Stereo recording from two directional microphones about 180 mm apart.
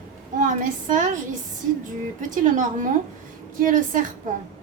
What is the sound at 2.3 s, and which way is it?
A woman's voice, 45° right (ahead or behind).